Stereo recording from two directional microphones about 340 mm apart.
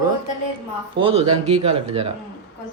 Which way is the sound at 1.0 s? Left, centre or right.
Centre.